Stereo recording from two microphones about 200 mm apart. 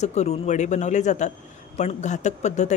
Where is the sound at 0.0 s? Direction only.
35° left (ahead or behind).